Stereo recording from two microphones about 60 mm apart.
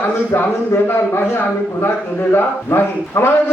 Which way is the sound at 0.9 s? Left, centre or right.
Left.